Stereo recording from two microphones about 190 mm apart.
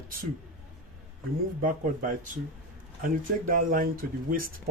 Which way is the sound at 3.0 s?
45° right (ahead or behind).